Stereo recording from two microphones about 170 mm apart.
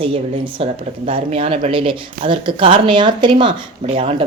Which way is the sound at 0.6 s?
35° right (ahead or behind).